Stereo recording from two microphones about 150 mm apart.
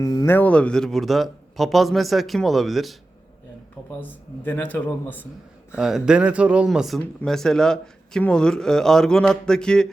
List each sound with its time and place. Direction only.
0.0 s speech: 25° left (ahead or behind)
0.3 s speech: 10° left (ahead or behind)
3.8 s speech: 10° left (ahead or behind)
5.7 s speech: 5° right (ahead or behind)